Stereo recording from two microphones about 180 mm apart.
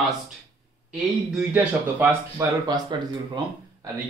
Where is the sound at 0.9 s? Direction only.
5° right (ahead or behind).